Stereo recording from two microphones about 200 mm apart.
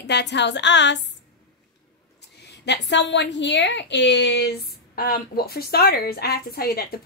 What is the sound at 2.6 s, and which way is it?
A woman's voice, 60° left (ahead or behind).